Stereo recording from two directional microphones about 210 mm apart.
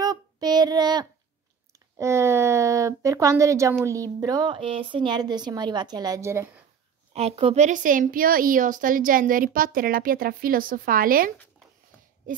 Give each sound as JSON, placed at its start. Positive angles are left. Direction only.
{"t": 0.0, "sound": "child singing", "side_deg": -20}
{"t": 1.7, "sound": "a sound", "side_deg": -15}
{"t": 3.8, "sound": "speech", "side_deg": -15}
{"t": 7.2, "sound": "a woman's voice", "side_deg": -30}